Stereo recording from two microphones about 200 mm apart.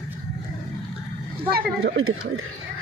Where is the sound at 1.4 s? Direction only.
50° right (ahead or behind).